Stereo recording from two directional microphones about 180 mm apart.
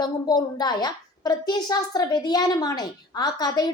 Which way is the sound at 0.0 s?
25° left (ahead or behind).